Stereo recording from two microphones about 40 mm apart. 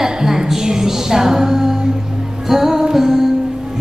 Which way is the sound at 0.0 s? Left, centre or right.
Centre.